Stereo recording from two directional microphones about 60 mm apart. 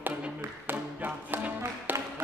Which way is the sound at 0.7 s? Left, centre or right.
Right.